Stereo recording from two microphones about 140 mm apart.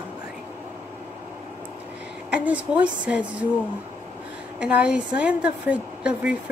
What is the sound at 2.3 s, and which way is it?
Speech, 10° right (ahead or behind).